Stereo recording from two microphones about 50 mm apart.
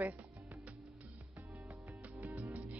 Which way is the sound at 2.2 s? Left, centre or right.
Right.